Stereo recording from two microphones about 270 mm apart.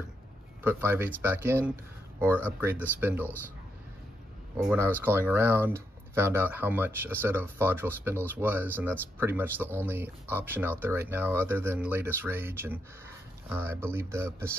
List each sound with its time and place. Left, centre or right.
0.7 s speech: centre
4.6 s speech: centre